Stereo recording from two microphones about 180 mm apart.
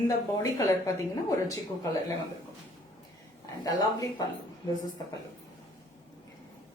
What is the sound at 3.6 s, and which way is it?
Speech, 20° left (ahead or behind).